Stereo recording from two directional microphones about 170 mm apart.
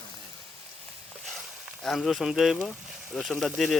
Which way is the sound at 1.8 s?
Centre (ahead or behind).